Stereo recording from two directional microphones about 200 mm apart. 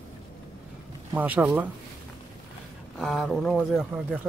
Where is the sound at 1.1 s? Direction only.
10° right (ahead or behind).